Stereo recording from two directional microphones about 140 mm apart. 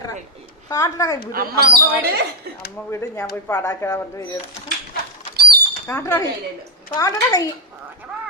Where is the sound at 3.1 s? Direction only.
15° left (ahead or behind).